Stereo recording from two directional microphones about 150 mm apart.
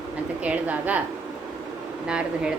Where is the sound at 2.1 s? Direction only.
5° right (ahead or behind).